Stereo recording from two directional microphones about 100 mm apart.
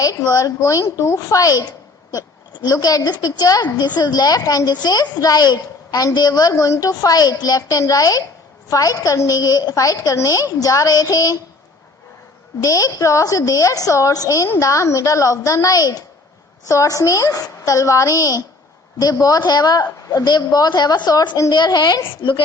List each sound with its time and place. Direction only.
0.0 s a woman's voice: 35° left (ahead or behind)
12.6 s a woman's voice: 35° left (ahead or behind)
22.2 s speech: 60° left (ahead or behind)